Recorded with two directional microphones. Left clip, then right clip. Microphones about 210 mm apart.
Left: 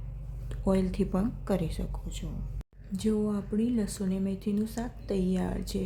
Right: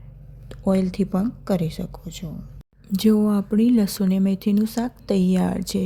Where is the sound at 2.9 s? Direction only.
40° right (ahead or behind).